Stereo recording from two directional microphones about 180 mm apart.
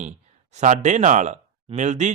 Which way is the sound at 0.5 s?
40° right (ahead or behind).